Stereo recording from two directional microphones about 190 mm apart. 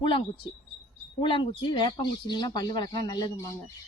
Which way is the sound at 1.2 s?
25° left (ahead or behind).